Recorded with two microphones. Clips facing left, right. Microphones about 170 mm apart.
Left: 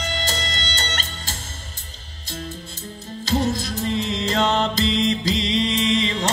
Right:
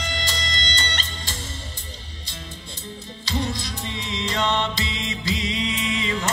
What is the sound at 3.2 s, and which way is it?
Music, 45° left (ahead or behind).